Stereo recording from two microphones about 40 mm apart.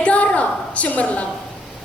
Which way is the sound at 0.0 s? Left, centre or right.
Left.